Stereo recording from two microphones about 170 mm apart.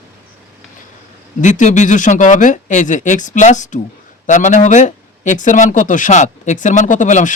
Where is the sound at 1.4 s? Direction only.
45° left (ahead or behind).